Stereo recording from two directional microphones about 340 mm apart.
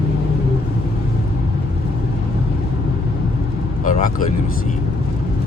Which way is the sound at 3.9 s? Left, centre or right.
Left.